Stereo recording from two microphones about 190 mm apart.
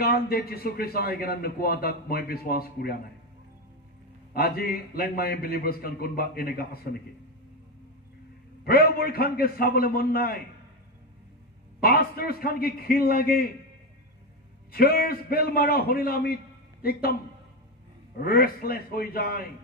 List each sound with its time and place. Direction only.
0.0 s a man's voice: 55° left (ahead or behind)
4.3 s a man's voice: 55° left (ahead or behind)
8.6 s a man's voice: 50° left (ahead or behind)
11.8 s a man's voice: 55° left (ahead or behind)
14.7 s a man's voice: 55° left (ahead or behind)
18.1 s a man's voice: 50° left (ahead or behind)